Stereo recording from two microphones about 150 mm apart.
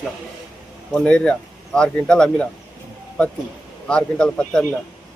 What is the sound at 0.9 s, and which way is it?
Speech, 5° left (ahead or behind).